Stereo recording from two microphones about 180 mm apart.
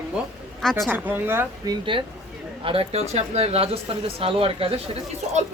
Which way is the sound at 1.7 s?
30° right (ahead or behind).